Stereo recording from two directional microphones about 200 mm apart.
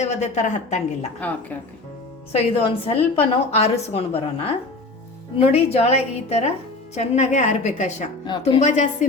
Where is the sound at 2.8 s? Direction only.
30° left (ahead or behind).